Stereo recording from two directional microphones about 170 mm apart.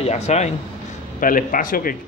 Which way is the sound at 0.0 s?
40° left (ahead or behind).